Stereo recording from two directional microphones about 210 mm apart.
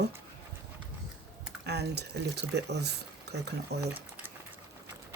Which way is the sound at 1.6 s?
50° right (ahead or behind).